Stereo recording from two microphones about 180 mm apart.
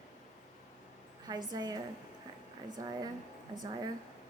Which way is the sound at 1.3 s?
20° right (ahead or behind).